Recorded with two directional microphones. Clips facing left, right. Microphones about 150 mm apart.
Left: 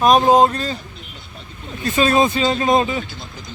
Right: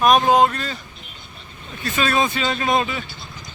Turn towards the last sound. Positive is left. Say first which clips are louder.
# left 4 dB
turn(degrees=35)  # may be behind; listen again after turning